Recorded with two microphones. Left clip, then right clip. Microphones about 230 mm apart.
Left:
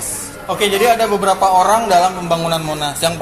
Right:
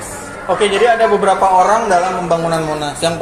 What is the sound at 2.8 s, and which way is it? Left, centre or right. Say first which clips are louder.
Speech: right 1 dB; left.